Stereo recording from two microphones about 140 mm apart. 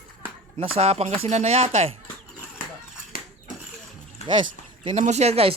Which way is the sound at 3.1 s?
90° left.